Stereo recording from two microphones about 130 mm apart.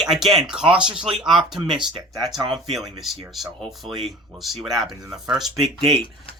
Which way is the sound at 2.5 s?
Centre (ahead or behind).